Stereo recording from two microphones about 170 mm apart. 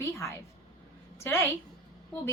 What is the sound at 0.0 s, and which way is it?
A woman's voice, 15° left (ahead or behind).